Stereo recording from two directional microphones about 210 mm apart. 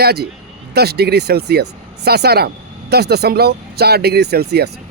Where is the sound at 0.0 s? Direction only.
50° right (ahead or behind).